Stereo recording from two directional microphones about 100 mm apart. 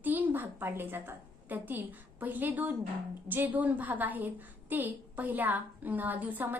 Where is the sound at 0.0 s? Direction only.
20° right (ahead or behind).